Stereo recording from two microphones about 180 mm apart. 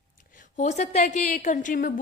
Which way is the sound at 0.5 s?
40° left (ahead or behind).